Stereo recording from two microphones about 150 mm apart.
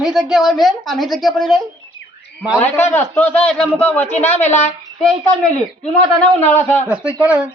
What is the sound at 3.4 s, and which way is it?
Speech, 5° left (ahead or behind).